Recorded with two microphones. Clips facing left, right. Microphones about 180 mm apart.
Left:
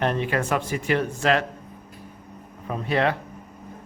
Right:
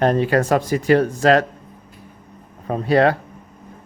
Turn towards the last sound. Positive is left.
turn(degrees=-40)  # may be behind; listen again after turning